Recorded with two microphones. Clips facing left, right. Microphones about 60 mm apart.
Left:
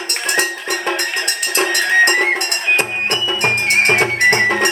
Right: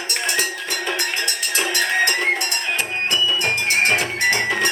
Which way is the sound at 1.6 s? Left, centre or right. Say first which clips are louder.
Left 6 dB; left.